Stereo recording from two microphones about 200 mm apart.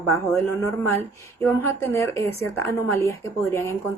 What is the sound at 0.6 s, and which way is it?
A woman's voice, 10° left (ahead or behind).